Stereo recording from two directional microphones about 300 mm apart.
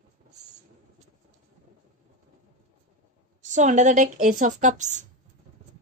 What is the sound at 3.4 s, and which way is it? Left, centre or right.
Speech, right.